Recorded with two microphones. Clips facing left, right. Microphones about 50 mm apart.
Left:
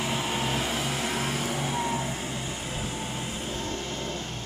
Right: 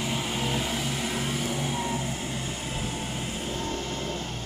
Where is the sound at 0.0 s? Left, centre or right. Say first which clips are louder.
Left 1 dB; centre.